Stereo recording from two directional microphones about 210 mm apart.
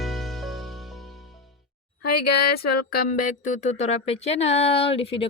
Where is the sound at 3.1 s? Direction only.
40° left (ahead or behind).